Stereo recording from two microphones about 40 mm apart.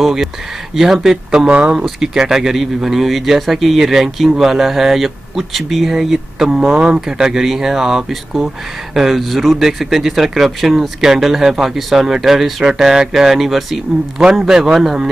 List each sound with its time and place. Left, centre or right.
0.7 s speech: centre
1.5 s speech: right
2.0 s speech: centre
6.7 s speech: right
7.1 s speech: centre
9.2 s speech: centre